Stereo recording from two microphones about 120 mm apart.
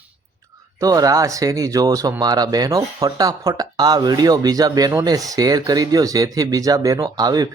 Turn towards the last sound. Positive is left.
turn(degrees=-35)  # may be behind; listen again after turning